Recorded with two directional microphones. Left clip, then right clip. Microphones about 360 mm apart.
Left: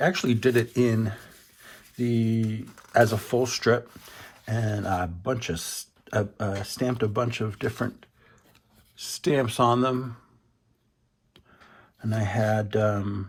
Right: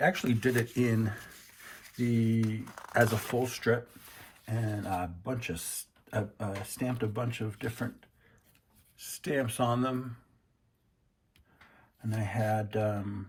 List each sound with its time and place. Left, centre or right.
0.0 s speech: centre
2.0 s a sound: centre
2.5 s speech: centre
9.0 s speech: centre
12.0 s speech: centre